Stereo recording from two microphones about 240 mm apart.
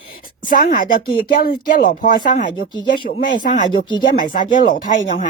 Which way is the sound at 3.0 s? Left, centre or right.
Left.